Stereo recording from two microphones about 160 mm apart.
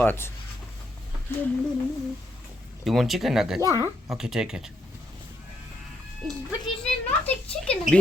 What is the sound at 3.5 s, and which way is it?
Speech, 20° right (ahead or behind).